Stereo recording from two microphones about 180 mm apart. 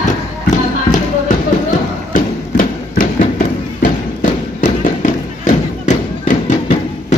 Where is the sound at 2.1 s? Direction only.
50° left (ahead or behind).